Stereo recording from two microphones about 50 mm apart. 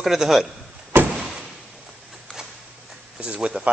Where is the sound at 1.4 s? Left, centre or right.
Centre.